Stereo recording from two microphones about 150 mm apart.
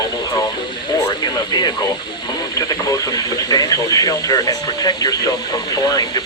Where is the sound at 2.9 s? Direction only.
25° left (ahead or behind).